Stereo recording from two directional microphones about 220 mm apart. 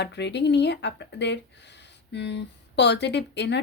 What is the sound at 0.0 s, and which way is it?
Speech, 50° left (ahead or behind).